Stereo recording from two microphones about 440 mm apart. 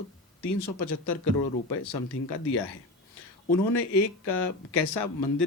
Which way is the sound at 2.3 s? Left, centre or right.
Left.